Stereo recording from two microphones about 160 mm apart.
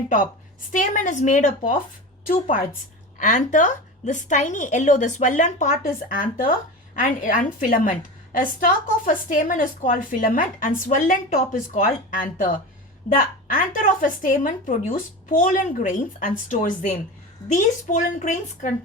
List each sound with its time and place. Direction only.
0.7 s a woman's voice: 55° left (ahead or behind)
3.2 s a woman's voice: 50° left (ahead or behind)